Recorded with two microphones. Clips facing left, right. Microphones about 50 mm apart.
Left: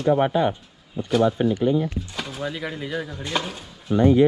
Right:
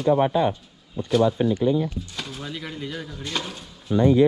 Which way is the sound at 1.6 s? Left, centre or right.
Left.